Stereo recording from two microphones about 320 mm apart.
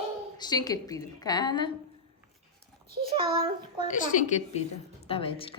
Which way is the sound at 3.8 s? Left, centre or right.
Left.